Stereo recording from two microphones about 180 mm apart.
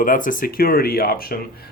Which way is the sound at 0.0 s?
50° left (ahead or behind).